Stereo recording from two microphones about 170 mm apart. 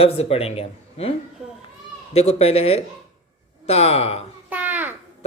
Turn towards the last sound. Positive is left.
turn(degrees=-10)  # may be behind; listen again after turning